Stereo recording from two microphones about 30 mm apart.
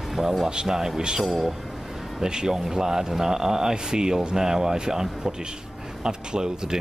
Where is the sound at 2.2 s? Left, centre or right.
Right.